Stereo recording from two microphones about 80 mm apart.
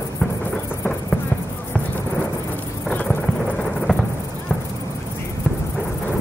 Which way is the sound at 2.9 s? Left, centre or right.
Centre.